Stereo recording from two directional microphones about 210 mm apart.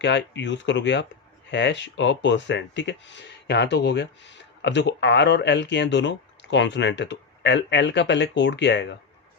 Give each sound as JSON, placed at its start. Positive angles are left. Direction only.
{"t": 0.0, "sound": "speech", "side_deg": 55}